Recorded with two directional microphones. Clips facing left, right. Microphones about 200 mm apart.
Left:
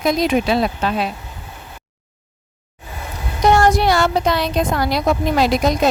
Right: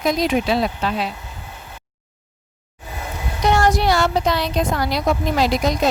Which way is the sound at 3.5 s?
55° left (ahead or behind).